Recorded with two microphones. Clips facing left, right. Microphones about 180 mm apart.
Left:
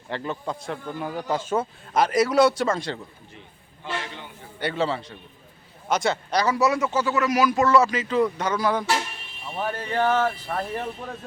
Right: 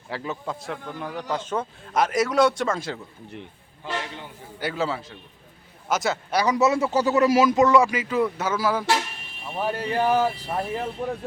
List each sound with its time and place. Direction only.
0.1 s speech: 5° right (ahead or behind)
4.6 s speech: centre (ahead or behind)
6.4 s speech: 20° right (ahead or behind)